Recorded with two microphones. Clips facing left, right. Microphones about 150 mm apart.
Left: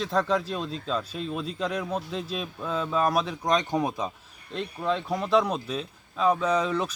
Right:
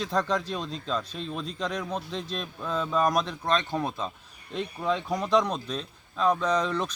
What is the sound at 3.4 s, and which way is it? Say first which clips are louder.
Speech: left 2 dB; 15° left (ahead or behind).